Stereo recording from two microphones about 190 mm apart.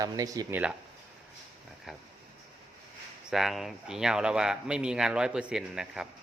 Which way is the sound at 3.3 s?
Centre (ahead or behind).